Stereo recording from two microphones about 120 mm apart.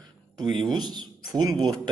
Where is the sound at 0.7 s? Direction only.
35° right (ahead or behind).